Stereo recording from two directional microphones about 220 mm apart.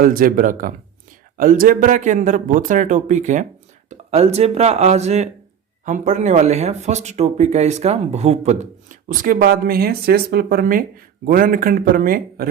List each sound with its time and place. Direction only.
0.0 s speech: 40° right (ahead or behind)